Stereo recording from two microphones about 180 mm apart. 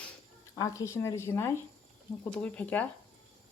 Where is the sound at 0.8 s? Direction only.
15° left (ahead or behind).